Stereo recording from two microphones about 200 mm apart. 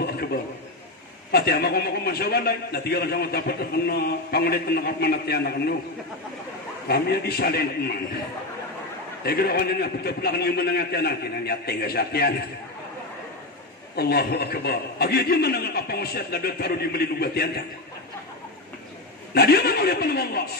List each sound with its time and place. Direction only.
0.0 s a sound: 50° left (ahead or behind)
1.3 s a man's voice: 55° left (ahead or behind)
6.9 s a man's voice: 50° left (ahead or behind)
9.2 s a man's voice: 50° left (ahead or behind)
13.9 s a man's voice: 55° left (ahead or behind)
19.3 s a man's voice: 50° left (ahead or behind)